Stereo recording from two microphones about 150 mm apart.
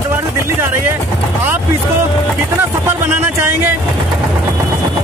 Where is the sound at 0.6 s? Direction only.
15° right (ahead or behind).